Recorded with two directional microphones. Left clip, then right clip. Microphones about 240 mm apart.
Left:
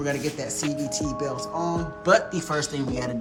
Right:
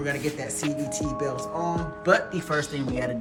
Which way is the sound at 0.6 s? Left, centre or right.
Centre.